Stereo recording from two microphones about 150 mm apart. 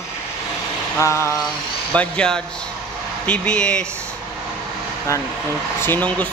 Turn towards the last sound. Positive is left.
turn(degrees=10)  # may be behind; listen again after turning